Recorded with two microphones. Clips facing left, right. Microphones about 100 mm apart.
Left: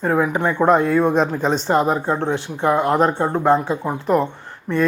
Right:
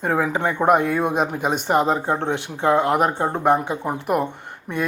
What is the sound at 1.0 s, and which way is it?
Speech, 15° right (ahead or behind).